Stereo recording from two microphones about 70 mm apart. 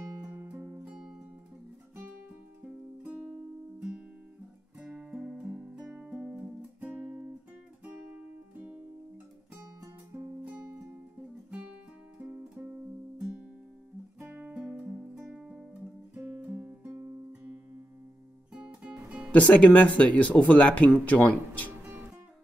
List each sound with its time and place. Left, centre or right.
0.3 s music: right
0.8 s music: centre
2.6 s music: centre
4.7 s music: centre
7.0 s guitar: right
7.8 s music: centre
10.1 s music: right
12.2 s music: right
16.3 s guitar: centre
16.9 s guitar: right
18.5 s music: centre
19.3 s speech: centre